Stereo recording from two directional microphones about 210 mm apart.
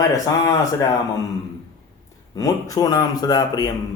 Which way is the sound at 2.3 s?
15° left (ahead or behind).